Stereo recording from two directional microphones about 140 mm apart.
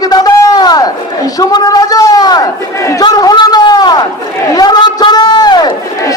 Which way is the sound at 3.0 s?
30° left (ahead or behind).